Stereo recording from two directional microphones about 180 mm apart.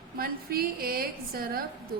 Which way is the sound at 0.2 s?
55° right (ahead or behind).